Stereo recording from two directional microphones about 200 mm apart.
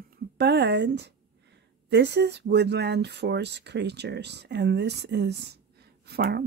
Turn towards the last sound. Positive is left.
turn(degrees=-55)  # may be behind; listen again after turning